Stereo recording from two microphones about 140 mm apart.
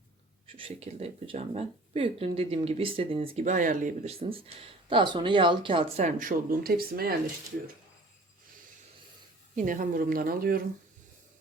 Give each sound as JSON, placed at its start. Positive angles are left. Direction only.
{"t": 0.5, "sound": "speech", "side_deg": -45}
{"t": 3.4, "sound": "speech", "side_deg": -70}
{"t": 4.0, "sound": "speech", "side_deg": -45}
{"t": 6.0, "sound": "speech", "side_deg": -70}
{"t": 9.6, "sound": "speech", "side_deg": -70}